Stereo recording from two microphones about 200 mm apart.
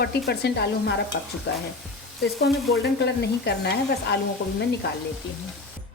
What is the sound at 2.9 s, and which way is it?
Sizzle, 55° left (ahead or behind).